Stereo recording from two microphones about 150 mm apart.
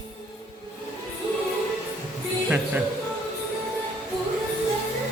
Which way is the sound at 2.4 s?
10° right (ahead or behind).